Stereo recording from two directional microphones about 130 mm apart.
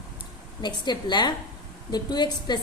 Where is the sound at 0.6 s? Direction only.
35° left (ahead or behind).